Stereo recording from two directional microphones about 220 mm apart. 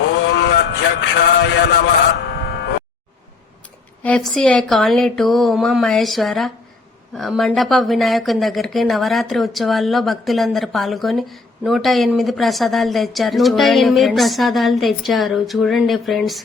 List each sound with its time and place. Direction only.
0.3 s a man's voice: 50° left (ahead or behind)
4.0 s speech: 5° left (ahead or behind)